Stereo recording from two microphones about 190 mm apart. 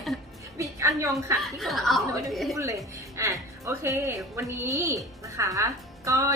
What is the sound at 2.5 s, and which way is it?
A woman's voice, 15° right (ahead or behind).